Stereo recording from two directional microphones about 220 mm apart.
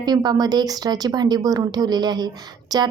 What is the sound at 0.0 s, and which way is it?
Speech, 20° right (ahead or behind).